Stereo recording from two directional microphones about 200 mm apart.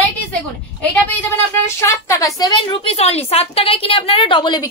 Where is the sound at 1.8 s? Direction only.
15° left (ahead or behind).